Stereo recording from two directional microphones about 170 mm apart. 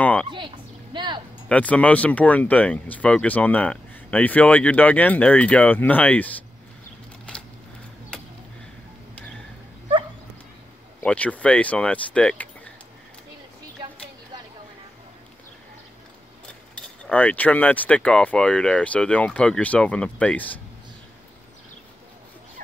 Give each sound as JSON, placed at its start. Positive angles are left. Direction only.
{"t": 0.0, "sound": "a sound", "side_deg": 10}
{"t": 0.9, "sound": "speech", "side_deg": -25}
{"t": 1.5, "sound": "speech", "side_deg": 10}
{"t": 7.3, "sound": "a sound", "side_deg": 5}
{"t": 11.0, "sound": "speech", "side_deg": 10}
{"t": 16.4, "sound": "speech", "side_deg": 5}